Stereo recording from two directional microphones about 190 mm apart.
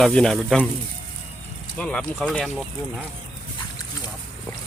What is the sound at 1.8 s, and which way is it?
Speech, 5° left (ahead or behind).